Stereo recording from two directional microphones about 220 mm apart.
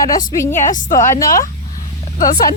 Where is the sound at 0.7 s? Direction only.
35° left (ahead or behind).